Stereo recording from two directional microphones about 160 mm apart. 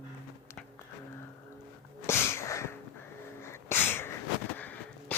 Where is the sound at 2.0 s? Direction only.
15° left (ahead or behind).